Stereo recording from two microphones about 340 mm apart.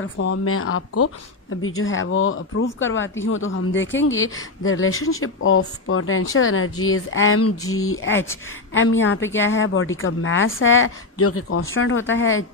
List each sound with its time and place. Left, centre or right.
0.0 s speech: left